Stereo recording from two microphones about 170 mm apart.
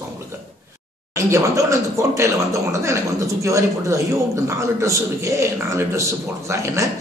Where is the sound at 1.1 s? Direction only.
20° right (ahead or behind).